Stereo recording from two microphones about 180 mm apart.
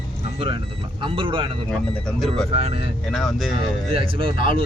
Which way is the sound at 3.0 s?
Centre (ahead or behind).